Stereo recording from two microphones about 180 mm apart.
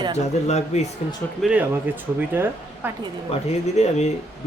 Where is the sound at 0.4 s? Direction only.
40° left (ahead or behind).